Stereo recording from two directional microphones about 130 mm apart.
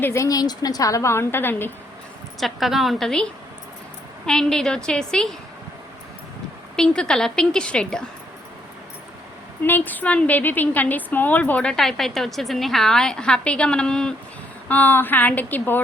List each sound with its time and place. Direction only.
0.0 s a woman's voice: 20° left (ahead or behind)
2.4 s a woman's voice: centre (ahead or behind)
4.3 s a woman's voice: 5° left (ahead or behind)
6.7 s a woman's voice: 5° left (ahead or behind)
9.6 s a woman's voice: 15° left (ahead or behind)